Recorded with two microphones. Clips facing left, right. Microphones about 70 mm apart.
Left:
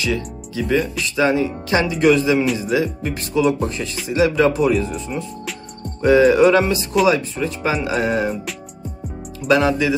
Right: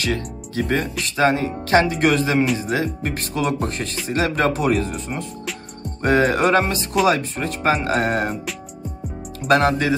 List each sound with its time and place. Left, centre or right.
0.0 s speech: right
9.5 s speech: right